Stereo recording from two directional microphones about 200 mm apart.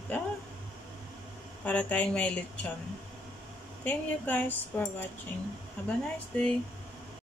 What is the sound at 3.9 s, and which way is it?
Speech, 10° left (ahead or behind).